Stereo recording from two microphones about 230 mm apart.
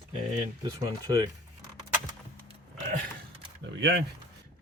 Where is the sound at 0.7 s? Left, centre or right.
Centre.